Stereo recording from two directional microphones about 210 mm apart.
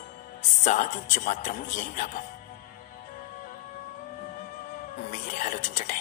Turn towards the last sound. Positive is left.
turn(degrees=35)  # may be behind; listen again after turning